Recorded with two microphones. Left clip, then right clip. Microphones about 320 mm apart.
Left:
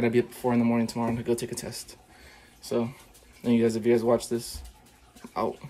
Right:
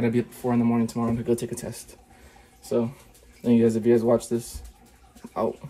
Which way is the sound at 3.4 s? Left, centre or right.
Centre.